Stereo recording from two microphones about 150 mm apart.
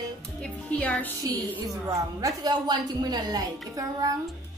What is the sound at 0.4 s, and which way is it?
Music, 10° left (ahead or behind).